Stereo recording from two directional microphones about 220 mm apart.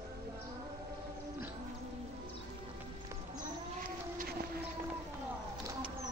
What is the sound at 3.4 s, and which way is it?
Cat, 40° right (ahead or behind).